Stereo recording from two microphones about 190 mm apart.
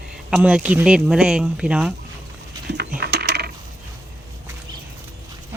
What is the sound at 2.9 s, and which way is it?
Coin, 60° right (ahead or behind).